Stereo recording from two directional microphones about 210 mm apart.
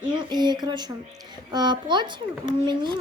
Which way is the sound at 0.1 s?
20° right (ahead or behind).